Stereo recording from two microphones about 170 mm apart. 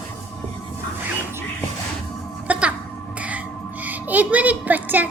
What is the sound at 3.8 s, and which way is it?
A child's voice, 10° right (ahead or behind).